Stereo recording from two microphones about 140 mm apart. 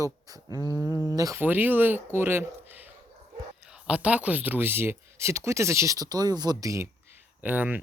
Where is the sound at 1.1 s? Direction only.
25° right (ahead or behind).